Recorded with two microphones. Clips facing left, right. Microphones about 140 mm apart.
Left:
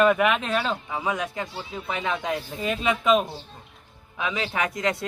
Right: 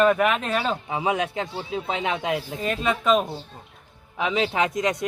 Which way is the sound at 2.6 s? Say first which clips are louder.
Even; centre (ahead or behind).